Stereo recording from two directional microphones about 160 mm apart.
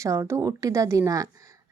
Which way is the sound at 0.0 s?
20° right (ahead or behind).